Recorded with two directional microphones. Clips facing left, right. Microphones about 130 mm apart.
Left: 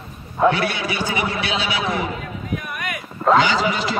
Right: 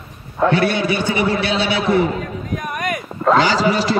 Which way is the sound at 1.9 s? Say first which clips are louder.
Right 8 dB; 40° right (ahead or behind).